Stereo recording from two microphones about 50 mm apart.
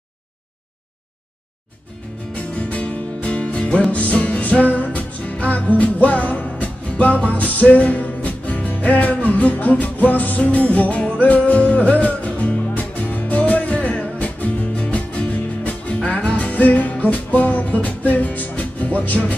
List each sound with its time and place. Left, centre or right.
2.3 s music: left